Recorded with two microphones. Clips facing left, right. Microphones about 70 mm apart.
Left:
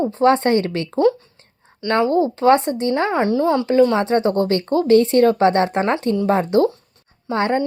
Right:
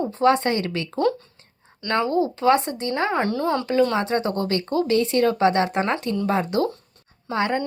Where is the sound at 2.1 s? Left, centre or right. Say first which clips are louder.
Left 4 dB; left.